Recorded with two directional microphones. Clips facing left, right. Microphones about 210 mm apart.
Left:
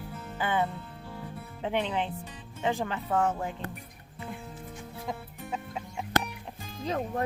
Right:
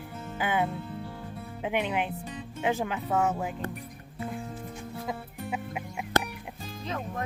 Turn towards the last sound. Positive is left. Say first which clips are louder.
# left 4 dB
turn(degrees=35)  # may be behind; listen again after turning